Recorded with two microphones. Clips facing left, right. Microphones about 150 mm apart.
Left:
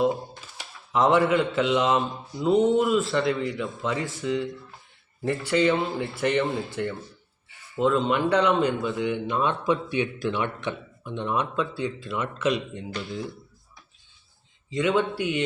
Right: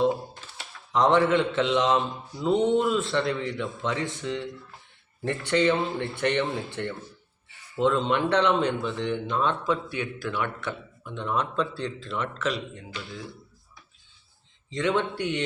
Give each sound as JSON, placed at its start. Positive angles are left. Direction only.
{"t": 0.9, "sound": "mantra", "side_deg": 5}
{"t": 7.8, "sound": "speech", "side_deg": 5}
{"t": 11.5, "sound": "speech", "side_deg": 5}
{"t": 14.7, "sound": "mantra", "side_deg": 5}